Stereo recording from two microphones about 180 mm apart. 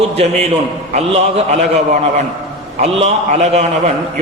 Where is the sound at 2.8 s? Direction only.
35° right (ahead or behind).